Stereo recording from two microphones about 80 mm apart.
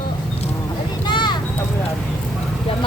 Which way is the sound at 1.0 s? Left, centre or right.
Left.